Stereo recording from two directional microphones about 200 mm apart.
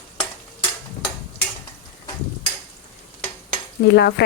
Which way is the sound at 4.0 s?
55° left (ahead or behind).